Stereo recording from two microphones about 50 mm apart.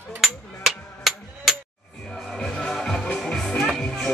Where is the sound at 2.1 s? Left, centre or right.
Centre.